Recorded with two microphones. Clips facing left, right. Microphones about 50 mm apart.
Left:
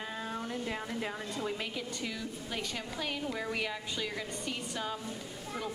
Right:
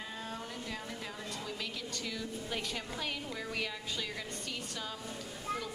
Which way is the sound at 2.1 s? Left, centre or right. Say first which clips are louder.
Even; centre.